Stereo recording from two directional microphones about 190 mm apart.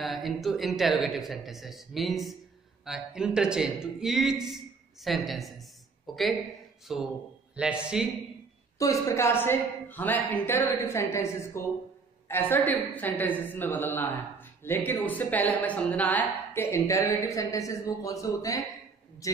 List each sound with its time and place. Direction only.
0.0 s a man's voice: centre (ahead or behind)
8.7 s a woman's voice: 15° left (ahead or behind)